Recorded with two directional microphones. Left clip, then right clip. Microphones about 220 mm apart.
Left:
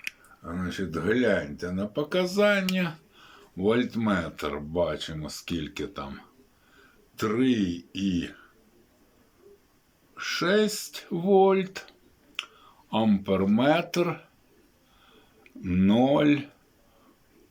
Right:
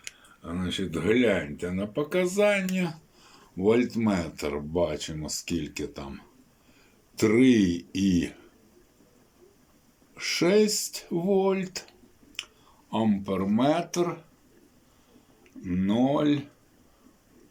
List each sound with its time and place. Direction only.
0.4 s speech: 10° right (ahead or behind)
7.2 s speech: 15° right (ahead or behind)
10.2 s speech: 15° right (ahead or behind); by 14.2 s 5° left (ahead or behind)
15.6 s speech: 5° left (ahead or behind)